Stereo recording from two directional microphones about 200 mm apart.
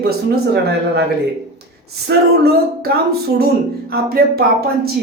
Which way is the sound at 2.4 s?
50° right (ahead or behind).